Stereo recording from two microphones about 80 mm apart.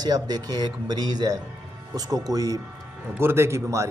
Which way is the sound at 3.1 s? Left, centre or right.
Right.